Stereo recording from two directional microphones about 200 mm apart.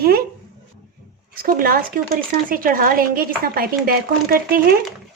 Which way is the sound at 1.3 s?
45° right (ahead or behind).